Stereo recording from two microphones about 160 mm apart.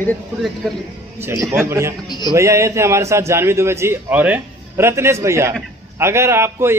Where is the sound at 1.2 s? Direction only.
15° right (ahead or behind).